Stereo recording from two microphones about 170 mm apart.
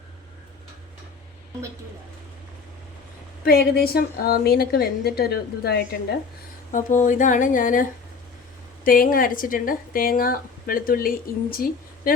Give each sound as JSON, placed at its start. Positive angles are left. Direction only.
{"t": 3.4, "sound": "speech", "side_deg": 65}
{"t": 6.7, "sound": "speech", "side_deg": 50}